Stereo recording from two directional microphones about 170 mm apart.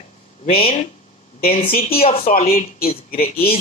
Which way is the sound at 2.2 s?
60° left (ahead or behind).